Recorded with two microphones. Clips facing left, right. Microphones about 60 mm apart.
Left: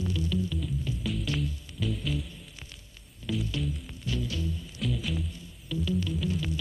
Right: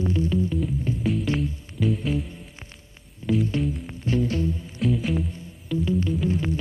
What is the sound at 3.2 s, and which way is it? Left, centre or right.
Music, right.